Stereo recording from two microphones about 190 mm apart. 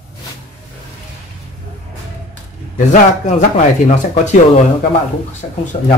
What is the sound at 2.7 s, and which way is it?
Speech, 40° left (ahead or behind).